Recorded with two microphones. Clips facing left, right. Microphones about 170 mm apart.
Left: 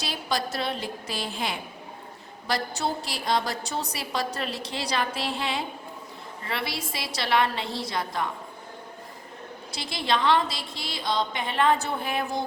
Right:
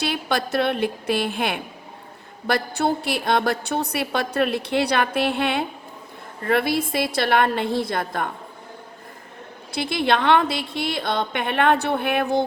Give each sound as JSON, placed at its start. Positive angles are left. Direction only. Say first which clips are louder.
{"t": 0.0, "sound": "a woman's voice", "louder": "right 5 dB", "side_deg": -60}
{"t": 9.7, "sound": "a woman's voice", "louder": "right 6 dB", "side_deg": -60}